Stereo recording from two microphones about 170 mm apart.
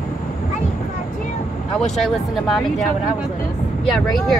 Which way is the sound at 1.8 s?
Centre (ahead or behind).